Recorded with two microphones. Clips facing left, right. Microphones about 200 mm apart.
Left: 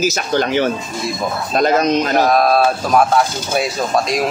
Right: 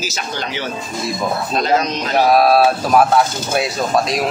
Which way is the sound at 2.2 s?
5° right (ahead or behind).